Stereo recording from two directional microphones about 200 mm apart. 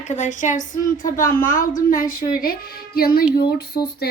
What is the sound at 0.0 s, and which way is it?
Speech, 35° left (ahead or behind).